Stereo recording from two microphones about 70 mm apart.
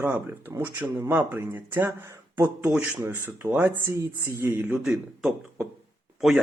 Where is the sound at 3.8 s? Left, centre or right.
Right.